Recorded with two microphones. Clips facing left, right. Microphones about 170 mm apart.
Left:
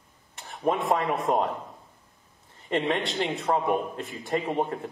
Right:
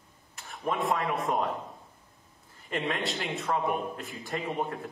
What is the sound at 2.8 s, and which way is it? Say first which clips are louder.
A man's voice: left 5 dB; centre (ahead or behind).